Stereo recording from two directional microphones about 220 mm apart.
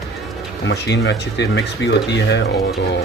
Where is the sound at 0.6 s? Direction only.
50° left (ahead or behind).